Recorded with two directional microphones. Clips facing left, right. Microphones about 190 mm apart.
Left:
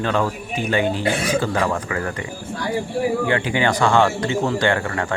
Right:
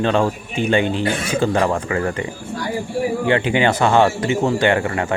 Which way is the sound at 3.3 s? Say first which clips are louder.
Right 3 dB; 25° right (ahead or behind).